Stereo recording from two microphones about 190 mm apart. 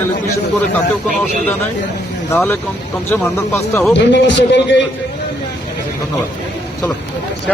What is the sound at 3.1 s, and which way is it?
Speech, 10° left (ahead or behind).